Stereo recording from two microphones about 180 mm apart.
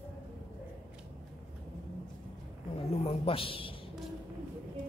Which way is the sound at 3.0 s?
30° left (ahead or behind).